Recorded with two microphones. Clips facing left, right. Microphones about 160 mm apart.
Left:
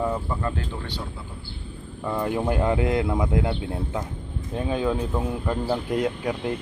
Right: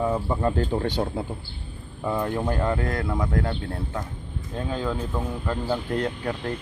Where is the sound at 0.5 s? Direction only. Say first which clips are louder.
Right 8 dB; 45° right (ahead or behind).